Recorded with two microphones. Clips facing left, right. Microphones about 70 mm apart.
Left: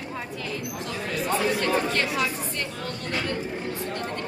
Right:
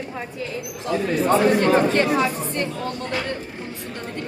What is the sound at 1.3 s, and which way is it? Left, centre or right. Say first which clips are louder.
Speech: right 7 dB; right.